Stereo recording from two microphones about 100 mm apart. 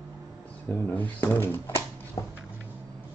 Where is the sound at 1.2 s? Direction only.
20° left (ahead or behind).